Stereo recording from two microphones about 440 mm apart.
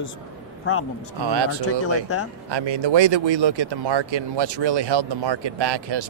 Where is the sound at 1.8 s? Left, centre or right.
Left.